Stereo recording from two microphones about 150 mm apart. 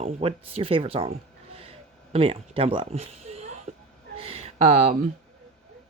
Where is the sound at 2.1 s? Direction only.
40° right (ahead or behind).